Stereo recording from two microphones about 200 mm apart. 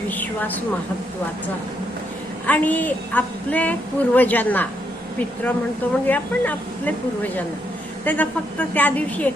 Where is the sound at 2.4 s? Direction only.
10° left (ahead or behind).